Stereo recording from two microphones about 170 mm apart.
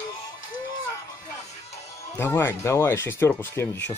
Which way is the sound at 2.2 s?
15° left (ahead or behind).